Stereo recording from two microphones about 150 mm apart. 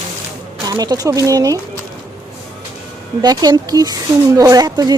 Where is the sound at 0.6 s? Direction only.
25° right (ahead or behind).